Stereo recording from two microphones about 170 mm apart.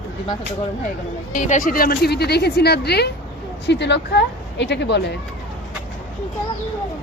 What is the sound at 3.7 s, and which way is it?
Speech, 90° left.